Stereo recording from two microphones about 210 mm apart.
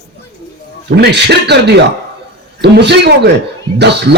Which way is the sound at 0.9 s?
50° right (ahead or behind).